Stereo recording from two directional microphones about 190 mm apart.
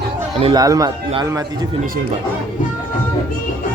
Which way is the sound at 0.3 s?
30° right (ahead or behind).